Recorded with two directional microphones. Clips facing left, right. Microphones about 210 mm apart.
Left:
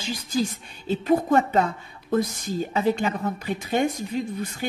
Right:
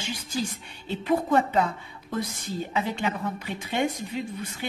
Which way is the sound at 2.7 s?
40° left (ahead or behind).